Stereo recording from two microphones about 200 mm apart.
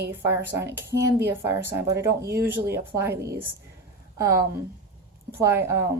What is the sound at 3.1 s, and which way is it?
Speech, 50° right (ahead or behind).